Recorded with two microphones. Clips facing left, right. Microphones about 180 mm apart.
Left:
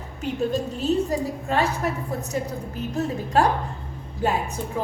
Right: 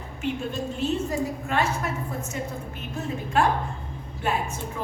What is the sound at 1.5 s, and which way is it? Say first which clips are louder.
A woman's voice: left 5 dB; 35° left (ahead or behind).